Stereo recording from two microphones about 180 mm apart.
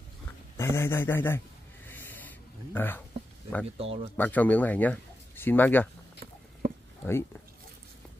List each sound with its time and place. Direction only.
0.6 s a man's voice: 15° left (ahead or behind)
1.9 s writing: 10° left (ahead or behind)
2.7 s speech: 10° left (ahead or behind)
3.7 s speech: 35° right (ahead or behind)
4.2 s speech: 10° left (ahead or behind)
6.6 s a sound: 55° right (ahead or behind)